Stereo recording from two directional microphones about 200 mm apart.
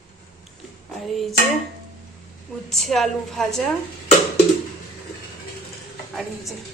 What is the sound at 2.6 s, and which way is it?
Speech, centre (ahead or behind).